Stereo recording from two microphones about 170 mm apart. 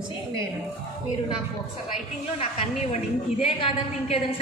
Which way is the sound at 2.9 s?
35° left (ahead or behind).